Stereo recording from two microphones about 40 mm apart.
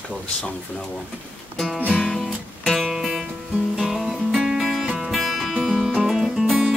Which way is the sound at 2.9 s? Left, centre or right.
Centre.